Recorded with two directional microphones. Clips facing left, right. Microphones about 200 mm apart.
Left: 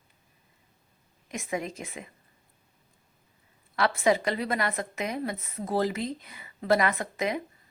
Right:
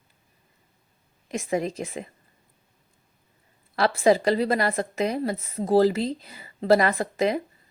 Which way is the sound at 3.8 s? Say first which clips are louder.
Right 4 dB; 35° right (ahead or behind).